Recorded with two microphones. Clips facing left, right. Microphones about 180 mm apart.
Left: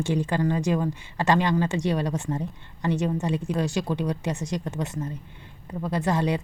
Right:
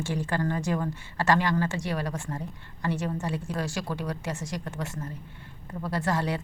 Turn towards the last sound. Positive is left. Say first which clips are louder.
# left 4 dB
turn(degrees=20)  # may be behind; listen again after turning